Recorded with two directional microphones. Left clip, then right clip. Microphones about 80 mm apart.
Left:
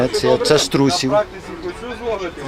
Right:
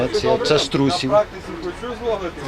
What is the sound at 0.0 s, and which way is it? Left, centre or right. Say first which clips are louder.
Speech: left 2 dB; left.